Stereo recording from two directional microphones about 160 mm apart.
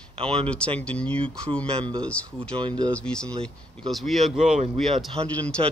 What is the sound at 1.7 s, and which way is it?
Speech, 35° right (ahead or behind).